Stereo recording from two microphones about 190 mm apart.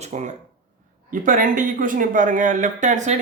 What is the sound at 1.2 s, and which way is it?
Speech, 45° right (ahead or behind).